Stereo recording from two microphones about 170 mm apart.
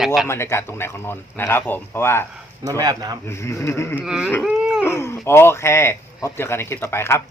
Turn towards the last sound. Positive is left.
turn(degrees=15)  # may be behind; listen again after turning